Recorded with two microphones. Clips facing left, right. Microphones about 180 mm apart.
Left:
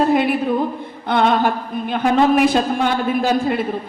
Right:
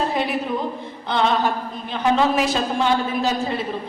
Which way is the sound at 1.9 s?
55° left (ahead or behind).